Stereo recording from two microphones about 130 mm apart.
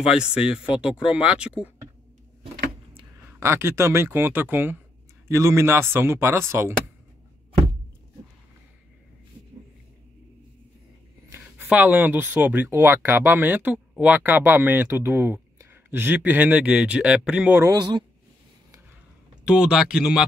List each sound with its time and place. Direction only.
0.0 s speech: 5° right (ahead or behind)
3.3 s speech: 20° right (ahead or behind)
11.3 s speech: 15° right (ahead or behind)
17.6 s speech: 35° right (ahead or behind)
19.4 s speech: 5° right (ahead or behind)